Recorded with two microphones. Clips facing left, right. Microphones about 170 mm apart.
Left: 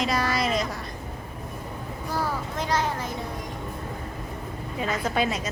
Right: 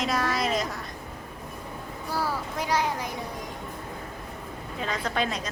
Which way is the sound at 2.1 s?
10° right (ahead or behind).